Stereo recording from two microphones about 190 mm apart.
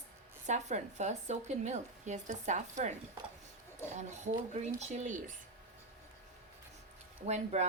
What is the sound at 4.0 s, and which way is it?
A woman's voice, 40° right (ahead or behind).